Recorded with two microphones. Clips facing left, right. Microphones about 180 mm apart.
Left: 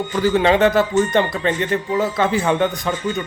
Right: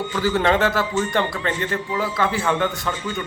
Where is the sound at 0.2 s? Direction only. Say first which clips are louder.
Left 4 dB; 20° left (ahead or behind).